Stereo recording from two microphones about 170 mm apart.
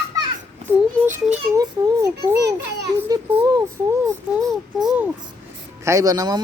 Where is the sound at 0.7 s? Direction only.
10° right (ahead or behind).